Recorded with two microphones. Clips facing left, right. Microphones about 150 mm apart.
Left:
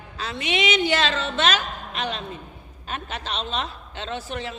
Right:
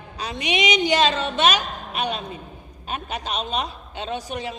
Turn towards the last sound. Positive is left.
turn(degrees=-15)  # may be behind; listen again after turning